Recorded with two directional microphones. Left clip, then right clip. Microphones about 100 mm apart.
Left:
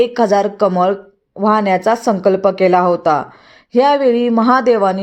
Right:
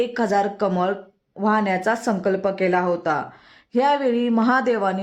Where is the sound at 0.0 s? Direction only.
30° left (ahead or behind).